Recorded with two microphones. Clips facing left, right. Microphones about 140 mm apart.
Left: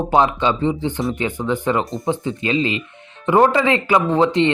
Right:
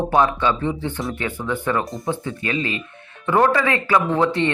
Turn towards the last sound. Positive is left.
turn(degrees=20)  # may be behind; listen again after turning